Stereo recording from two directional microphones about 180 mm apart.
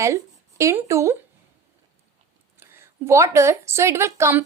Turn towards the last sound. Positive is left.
turn(degrees=-15)  # may be behind; listen again after turning